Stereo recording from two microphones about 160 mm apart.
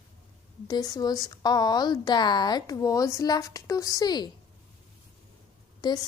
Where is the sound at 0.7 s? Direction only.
25° left (ahead or behind).